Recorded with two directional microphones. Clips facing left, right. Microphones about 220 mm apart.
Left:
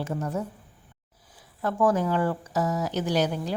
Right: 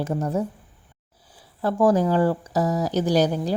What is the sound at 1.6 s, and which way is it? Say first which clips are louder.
Speech: right 4 dB; 35° right (ahead or behind).